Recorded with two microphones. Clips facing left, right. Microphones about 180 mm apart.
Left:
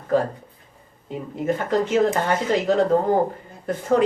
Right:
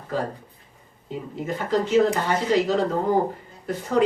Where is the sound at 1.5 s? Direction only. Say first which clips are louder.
Left 2 dB; 50° left (ahead or behind).